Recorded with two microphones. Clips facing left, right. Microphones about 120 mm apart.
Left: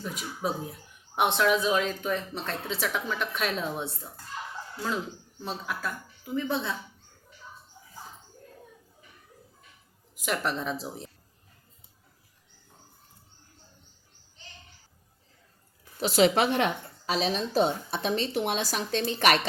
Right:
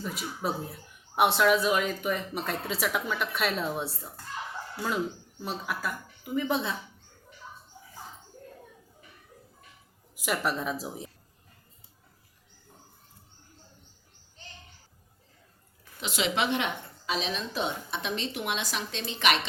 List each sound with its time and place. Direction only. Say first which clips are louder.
0.0 s speech: even; 5° right (ahead or behind)
5.4 s speech: right 1 dB; 10° right (ahead or behind)
10.2 s speech: even; 5° right (ahead or behind)
16.0 s a woman's voice: left 7 dB; 40° left (ahead or behind)